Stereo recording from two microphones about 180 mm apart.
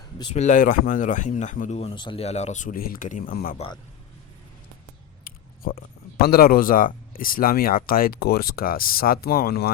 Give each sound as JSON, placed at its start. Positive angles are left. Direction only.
{"t": 0.3, "sound": "speech", "side_deg": 45}
{"t": 5.2, "sound": "speech", "side_deg": 55}